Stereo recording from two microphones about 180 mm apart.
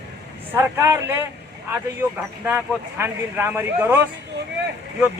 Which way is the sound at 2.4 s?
15° right (ahead or behind).